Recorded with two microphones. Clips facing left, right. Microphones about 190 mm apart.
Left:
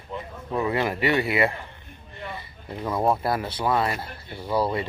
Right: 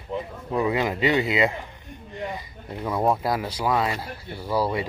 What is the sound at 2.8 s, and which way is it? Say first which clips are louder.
Speech: even; centre (ahead or behind).